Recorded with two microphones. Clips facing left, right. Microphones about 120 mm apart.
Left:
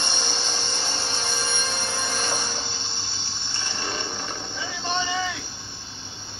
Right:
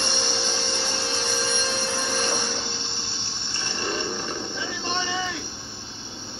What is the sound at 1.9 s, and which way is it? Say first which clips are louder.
Train: right 2 dB; 15° left (ahead or behind).